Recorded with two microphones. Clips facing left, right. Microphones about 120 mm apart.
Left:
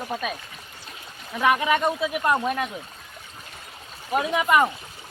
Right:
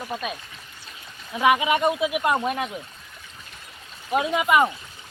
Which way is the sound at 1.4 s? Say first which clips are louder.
Right 1 dB; 10° right (ahead or behind).